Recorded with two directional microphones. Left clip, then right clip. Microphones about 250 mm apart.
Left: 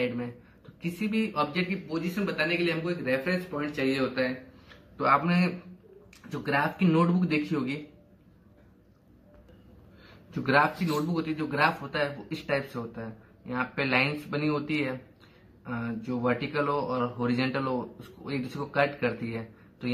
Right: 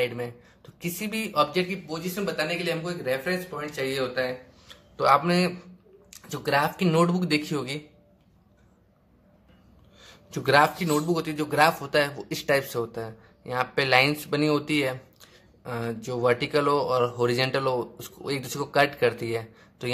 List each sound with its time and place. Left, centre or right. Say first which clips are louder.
0.8 s speech: even; right
10.4 s speech: right 4 dB; right